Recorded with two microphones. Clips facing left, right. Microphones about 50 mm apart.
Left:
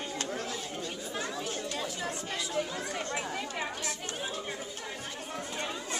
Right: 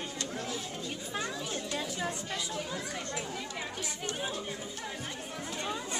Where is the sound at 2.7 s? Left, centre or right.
Left.